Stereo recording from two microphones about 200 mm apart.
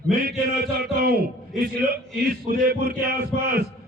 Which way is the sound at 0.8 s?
50° right (ahead or behind).